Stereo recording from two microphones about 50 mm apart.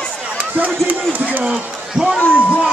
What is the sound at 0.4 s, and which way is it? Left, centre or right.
Speech, right.